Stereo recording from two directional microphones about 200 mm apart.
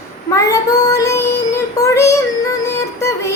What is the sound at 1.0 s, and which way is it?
Music, 15° left (ahead or behind).